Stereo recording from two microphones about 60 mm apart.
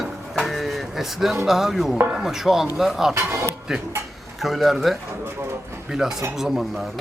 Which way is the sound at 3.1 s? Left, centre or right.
Right.